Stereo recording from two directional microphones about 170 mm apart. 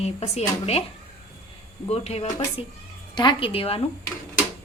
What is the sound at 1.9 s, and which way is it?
Speech, 40° left (ahead or behind).